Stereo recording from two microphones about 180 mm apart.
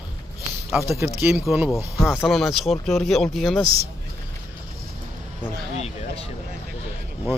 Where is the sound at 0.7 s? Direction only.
5° right (ahead or behind).